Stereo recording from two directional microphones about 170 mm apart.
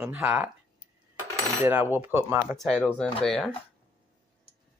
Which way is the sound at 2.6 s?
5° left (ahead or behind).